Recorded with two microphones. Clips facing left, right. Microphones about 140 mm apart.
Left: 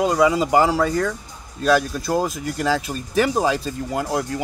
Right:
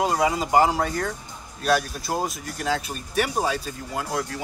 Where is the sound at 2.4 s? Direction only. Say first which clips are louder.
Left 5 dB; 90° left.